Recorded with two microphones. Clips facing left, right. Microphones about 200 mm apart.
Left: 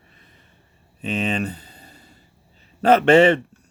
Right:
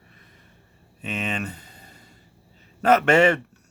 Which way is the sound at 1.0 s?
35° left (ahead or behind).